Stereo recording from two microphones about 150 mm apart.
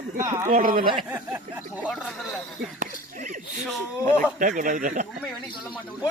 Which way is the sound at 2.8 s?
55° right (ahead or behind).